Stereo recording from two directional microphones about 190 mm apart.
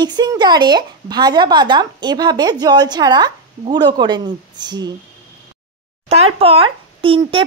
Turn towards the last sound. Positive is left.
turn(degrees=-30)  # may be behind; listen again after turning